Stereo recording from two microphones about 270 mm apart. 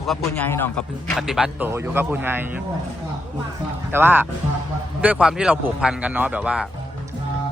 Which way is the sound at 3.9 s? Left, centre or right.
Centre.